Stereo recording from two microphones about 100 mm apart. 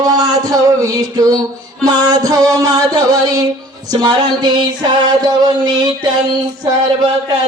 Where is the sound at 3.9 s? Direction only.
45° right (ahead or behind).